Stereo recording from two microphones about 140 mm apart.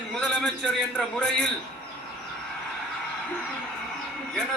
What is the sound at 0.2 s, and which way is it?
A man's voice, 10° left (ahead or behind).